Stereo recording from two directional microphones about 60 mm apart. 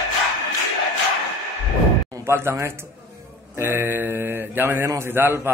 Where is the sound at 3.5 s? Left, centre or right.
Right.